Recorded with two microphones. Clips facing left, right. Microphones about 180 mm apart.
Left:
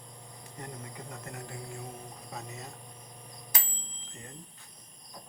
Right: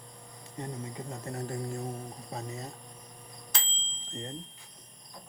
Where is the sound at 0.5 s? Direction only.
25° right (ahead or behind).